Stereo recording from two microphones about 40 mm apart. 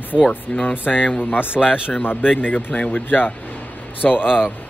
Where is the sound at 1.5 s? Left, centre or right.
Right.